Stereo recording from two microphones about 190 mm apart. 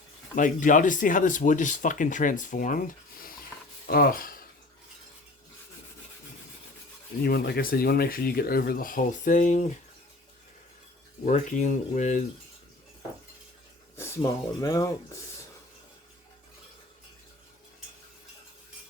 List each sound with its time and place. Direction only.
0.3 s speech: 45° left (ahead or behind)
7.2 s speech: 55° left (ahead or behind)
11.3 s speech: 40° left (ahead or behind)
13.9 s speech: 15° left (ahead or behind)